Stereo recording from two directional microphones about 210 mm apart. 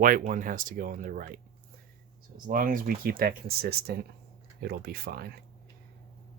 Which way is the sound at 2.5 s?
40° right (ahead or behind).